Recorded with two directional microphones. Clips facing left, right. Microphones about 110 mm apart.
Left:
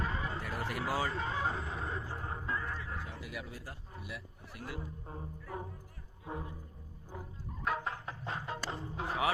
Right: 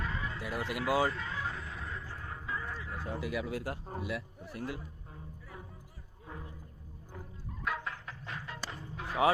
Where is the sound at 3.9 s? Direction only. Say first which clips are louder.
Right 9 dB; 40° right (ahead or behind).